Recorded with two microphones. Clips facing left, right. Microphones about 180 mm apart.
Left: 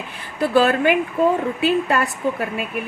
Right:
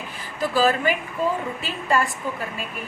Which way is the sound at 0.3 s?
65° left (ahead or behind).